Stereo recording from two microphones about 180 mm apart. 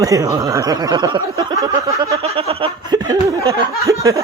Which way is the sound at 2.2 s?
35° right (ahead or behind).